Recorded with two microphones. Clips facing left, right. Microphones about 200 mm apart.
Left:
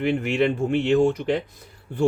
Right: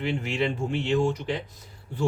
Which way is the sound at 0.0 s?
55° left (ahead or behind).